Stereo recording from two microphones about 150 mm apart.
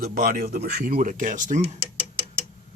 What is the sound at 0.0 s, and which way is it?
Speech, 70° right (ahead or behind).